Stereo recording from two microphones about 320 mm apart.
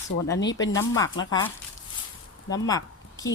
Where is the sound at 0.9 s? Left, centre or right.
Centre.